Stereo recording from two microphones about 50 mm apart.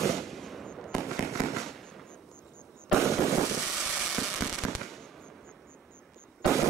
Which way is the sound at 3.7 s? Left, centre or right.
Centre.